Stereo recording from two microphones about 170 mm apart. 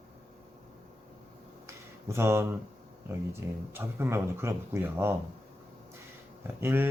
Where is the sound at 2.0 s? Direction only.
15° right (ahead or behind).